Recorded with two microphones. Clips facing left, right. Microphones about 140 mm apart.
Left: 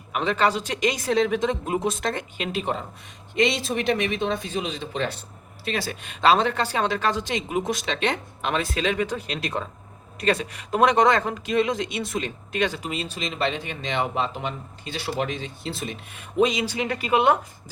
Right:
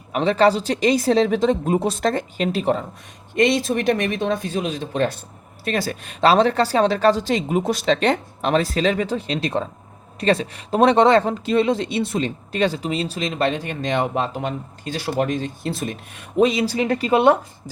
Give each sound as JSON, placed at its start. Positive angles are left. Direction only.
{"t": 0.1, "sound": "speech", "side_deg": -35}
{"t": 3.3, "sound": "speech", "side_deg": -50}